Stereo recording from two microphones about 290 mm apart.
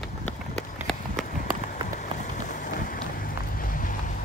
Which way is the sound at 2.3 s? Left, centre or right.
Left.